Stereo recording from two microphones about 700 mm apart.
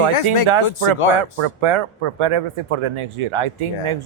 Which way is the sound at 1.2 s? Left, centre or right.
Right.